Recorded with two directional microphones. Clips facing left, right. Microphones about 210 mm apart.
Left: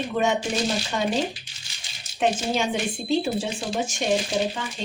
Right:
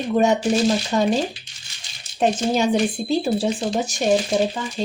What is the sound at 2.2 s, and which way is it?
Speech, 40° right (ahead or behind).